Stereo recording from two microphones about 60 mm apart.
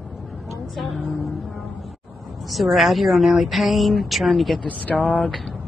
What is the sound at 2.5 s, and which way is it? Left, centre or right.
Speech, centre.